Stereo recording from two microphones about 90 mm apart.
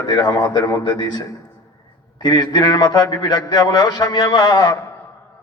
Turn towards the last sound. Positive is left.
turn(degrees=45)  # may be behind; listen again after turning